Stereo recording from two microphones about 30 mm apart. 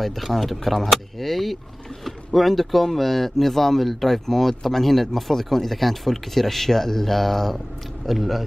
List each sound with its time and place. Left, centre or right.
0.0 s speech: centre
8.1 s speech: centre